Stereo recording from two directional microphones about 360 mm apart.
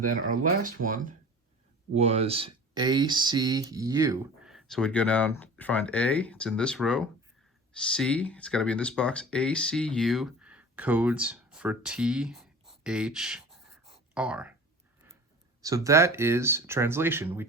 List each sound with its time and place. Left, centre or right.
0.0 s speech: right; by 12.5 s centre
12.8 s writing: centre
15.6 s speech: centre